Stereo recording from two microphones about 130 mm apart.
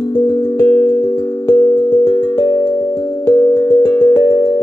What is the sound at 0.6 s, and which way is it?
Music, 25° left (ahead or behind).